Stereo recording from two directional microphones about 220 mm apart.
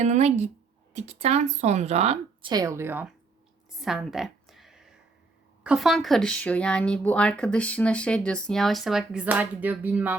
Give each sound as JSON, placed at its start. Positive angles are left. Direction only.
{"t": 0.0, "sound": "speech", "side_deg": -30}
{"t": 3.8, "sound": "a sound", "side_deg": 0}
{"t": 5.6, "sound": "speech", "side_deg": 0}